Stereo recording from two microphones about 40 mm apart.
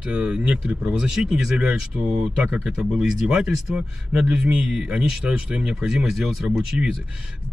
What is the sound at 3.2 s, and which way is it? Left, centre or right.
Speech, right.